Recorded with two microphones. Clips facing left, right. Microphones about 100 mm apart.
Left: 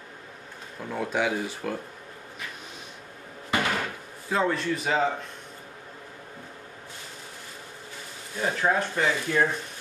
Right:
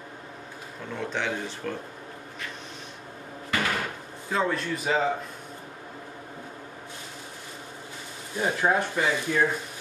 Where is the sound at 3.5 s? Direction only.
20° left (ahead or behind).